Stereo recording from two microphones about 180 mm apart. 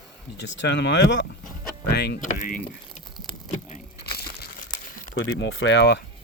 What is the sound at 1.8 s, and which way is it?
Speech, 65° left (ahead or behind).